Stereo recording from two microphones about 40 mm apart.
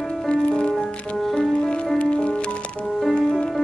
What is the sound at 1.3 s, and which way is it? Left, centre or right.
Music, centre.